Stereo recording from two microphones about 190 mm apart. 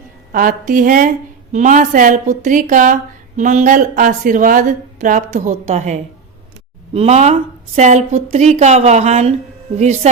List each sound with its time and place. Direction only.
0.3 s a woman's voice: 45° right (ahead or behind)